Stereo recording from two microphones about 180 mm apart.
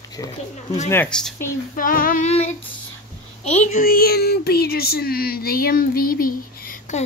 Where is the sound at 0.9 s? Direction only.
5° left (ahead or behind).